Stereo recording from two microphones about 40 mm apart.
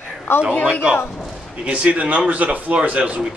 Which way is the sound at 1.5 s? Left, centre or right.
Right.